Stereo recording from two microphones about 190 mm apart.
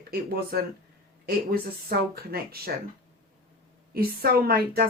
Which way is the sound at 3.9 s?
55° right (ahead or behind).